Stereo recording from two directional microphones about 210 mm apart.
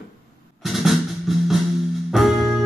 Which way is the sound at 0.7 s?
Centre (ahead or behind).